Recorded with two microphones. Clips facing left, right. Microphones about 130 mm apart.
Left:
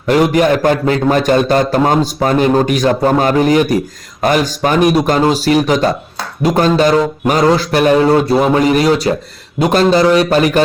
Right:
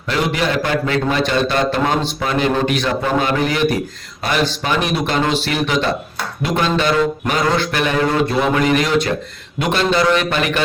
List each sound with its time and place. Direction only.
0.1 s a man's voice: 45° left (ahead or behind)